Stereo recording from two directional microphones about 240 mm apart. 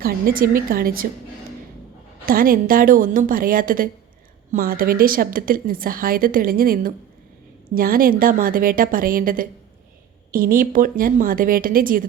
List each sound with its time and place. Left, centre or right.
0.0 s a woman's voice: right
2.2 s a woman's voice: right